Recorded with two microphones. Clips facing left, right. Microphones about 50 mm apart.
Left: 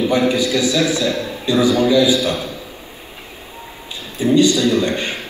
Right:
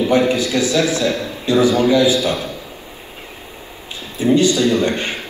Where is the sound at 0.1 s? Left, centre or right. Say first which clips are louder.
Right 1 dB; right.